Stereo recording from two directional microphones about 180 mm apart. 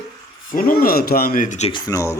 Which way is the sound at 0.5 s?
55° left (ahead or behind).